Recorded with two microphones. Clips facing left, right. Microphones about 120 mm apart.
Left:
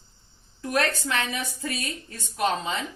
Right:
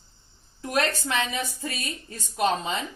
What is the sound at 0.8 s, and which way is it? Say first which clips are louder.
Speech: even; 20° right (ahead or behind).